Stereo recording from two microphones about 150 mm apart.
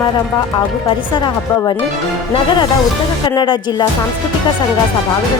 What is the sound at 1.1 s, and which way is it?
A woman's voice, 30° left (ahead or behind).